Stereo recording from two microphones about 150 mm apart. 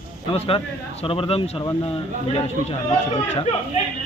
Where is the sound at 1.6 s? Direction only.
25° left (ahead or behind).